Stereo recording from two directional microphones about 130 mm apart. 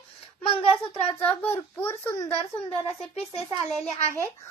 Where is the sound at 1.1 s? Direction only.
15° left (ahead or behind).